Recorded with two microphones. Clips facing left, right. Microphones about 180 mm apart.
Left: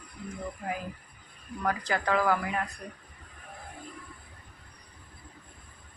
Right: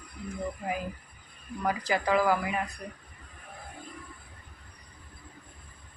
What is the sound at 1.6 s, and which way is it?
Speech, 10° right (ahead or behind).